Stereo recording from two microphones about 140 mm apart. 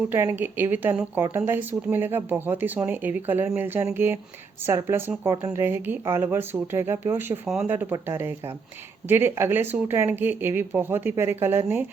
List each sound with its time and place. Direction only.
0.1 s speech: 15° right (ahead or behind)